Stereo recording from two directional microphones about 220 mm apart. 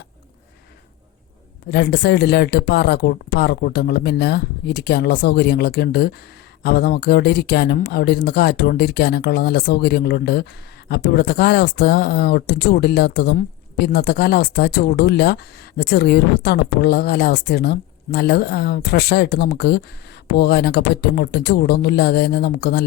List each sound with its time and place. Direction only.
1.7 s speech: 45° left (ahead or behind)